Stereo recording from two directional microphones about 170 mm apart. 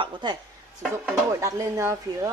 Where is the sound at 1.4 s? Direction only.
20° right (ahead or behind).